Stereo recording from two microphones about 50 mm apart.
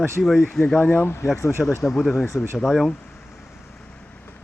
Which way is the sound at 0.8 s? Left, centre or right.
Left.